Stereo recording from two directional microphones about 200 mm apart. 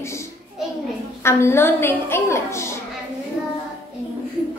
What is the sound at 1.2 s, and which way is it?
A woman's voice, 15° left (ahead or behind).